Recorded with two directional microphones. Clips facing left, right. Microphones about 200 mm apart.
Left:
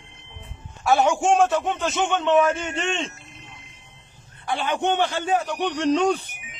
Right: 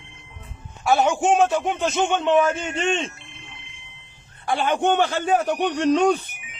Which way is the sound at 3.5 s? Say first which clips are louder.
Even; 40° left (ahead or behind).